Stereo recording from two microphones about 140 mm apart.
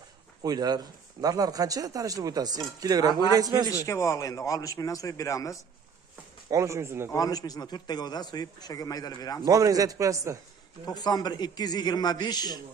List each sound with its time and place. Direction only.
0.4 s speech: 30° right (ahead or behind)
3.8 s a man's voice: 20° left (ahead or behind)
6.5 s speech: 20° right (ahead or behind)
7.1 s a man's voice: 25° left (ahead or behind)
9.4 s speech: 25° right (ahead or behind)
10.9 s a man's voice: 30° left (ahead or behind)